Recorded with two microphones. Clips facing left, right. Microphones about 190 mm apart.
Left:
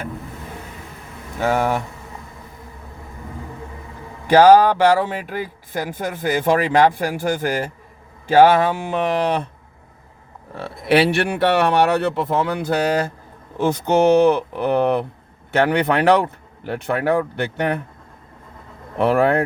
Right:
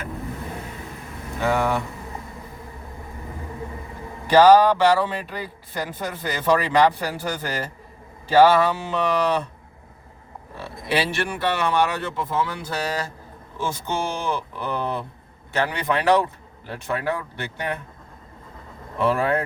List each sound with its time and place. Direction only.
1.4 s speech: 40° left (ahead or behind)
4.4 s speech: 50° left (ahead or behind)
10.6 s speech: 65° left (ahead or behind)
18.9 s speech: 60° left (ahead or behind)